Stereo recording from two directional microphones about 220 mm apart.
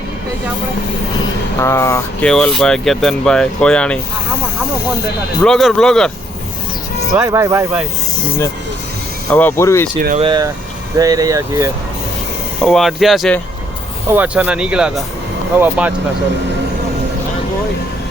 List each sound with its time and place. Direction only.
1.5 s speech: 10° left (ahead or behind)
5.4 s speech: centre (ahead or behind)
7.1 s speech: 15° right (ahead or behind)
9.3 s speech: 10° left (ahead or behind)
10.2 s speech: 20° right (ahead or behind)
12.6 s speech: centre (ahead or behind)